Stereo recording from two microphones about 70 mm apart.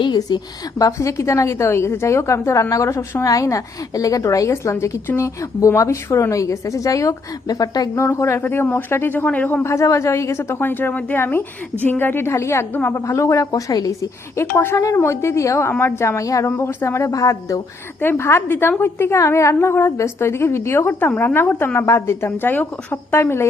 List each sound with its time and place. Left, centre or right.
0.1 s a woman's voice: left
7.9 s a woman's voice: left
9.2 s a man's voice: left
9.6 s a woman's voice: left
12.7 s a man's voice: left
13.1 s a woman's voice: left
14.3 s a woman's voice: left
17.1 s a woman's voice: left
18.0 s a woman's voice: left